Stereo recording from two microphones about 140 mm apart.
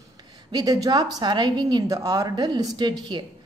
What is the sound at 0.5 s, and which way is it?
A woman's voice, 25° right (ahead or behind).